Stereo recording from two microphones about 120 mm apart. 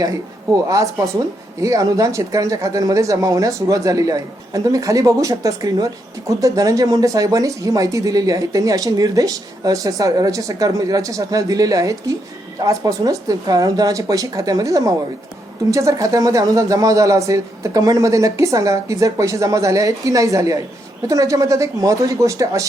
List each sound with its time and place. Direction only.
0.0 s speech: 30° right (ahead or behind)